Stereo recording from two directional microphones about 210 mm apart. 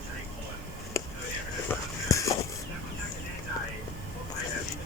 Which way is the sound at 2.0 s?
15° left (ahead or behind).